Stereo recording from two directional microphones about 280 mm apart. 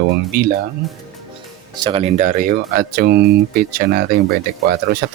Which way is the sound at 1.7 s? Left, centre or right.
Centre.